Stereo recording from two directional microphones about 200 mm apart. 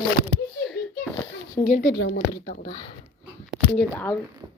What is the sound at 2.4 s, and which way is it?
Speech, 35° left (ahead or behind).